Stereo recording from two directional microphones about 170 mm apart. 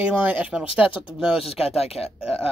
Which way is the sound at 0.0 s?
5° right (ahead or behind).